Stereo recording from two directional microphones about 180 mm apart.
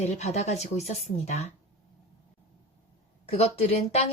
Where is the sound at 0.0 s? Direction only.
40° left (ahead or behind).